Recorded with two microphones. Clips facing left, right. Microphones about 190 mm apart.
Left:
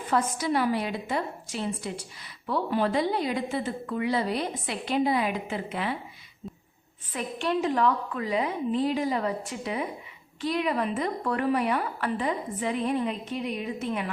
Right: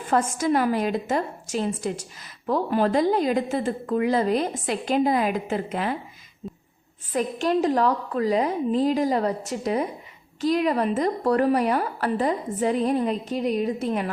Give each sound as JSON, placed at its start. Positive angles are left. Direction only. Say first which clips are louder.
{"t": 0.1, "sound": "a woman's voice", "louder": "right 4 dB", "side_deg": -45}
{"t": 7.1, "sound": "a woman's voice", "louder": "right 6 dB", "side_deg": -40}